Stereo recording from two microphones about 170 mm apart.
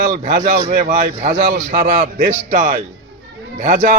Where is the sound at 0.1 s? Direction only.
50° right (ahead or behind).